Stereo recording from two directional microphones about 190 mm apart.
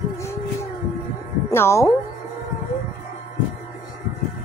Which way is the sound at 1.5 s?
15° left (ahead or behind).